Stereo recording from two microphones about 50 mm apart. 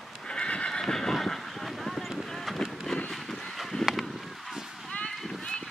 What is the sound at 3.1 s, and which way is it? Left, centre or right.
Vehicle, centre.